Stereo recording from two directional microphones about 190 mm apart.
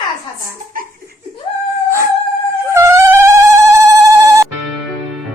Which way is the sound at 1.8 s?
15° right (ahead or behind).